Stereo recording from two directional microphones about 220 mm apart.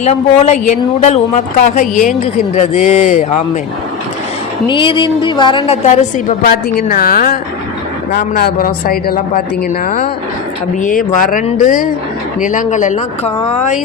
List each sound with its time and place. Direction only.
0.0 s a woman's voice: 30° left (ahead or behind)
4.7 s a woman's voice: 20° left (ahead or behind)